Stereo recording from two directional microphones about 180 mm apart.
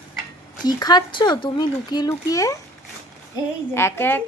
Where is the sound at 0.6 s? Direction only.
20° left (ahead or behind).